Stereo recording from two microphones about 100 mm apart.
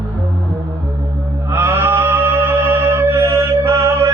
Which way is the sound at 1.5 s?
25° right (ahead or behind).